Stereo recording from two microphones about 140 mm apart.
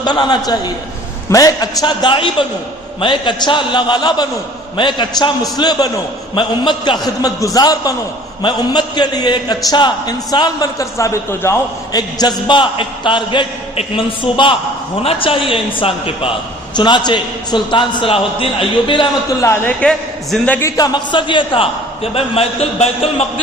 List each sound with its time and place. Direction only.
0.0 s a man's voice: 30° left (ahead or behind)
11.9 s a man's voice: 30° left (ahead or behind)
19.4 s a man's voice: 15° left (ahead or behind)
19.8 s a man's voice: 5° left (ahead or behind)
20.6 s a man's voice: 25° left (ahead or behind); by 23.2 s 45° left (ahead or behind)